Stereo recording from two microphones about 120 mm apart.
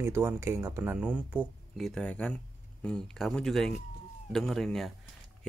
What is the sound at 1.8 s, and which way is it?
Speech, 5° left (ahead or behind).